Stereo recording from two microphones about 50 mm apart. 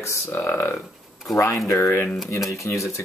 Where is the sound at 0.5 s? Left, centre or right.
Left.